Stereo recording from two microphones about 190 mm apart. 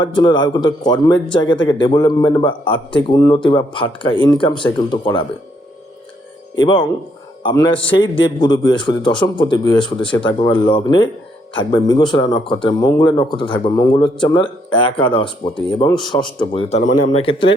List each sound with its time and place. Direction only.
0.0 s a man's voice: 25° left (ahead or behind)
6.6 s a man's voice: 25° left (ahead or behind)